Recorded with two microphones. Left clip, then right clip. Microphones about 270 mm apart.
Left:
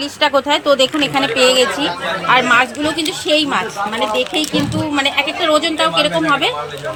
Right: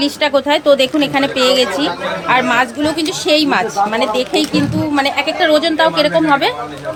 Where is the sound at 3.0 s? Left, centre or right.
Right.